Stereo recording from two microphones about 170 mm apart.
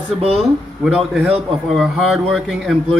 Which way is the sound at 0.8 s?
Centre (ahead or behind).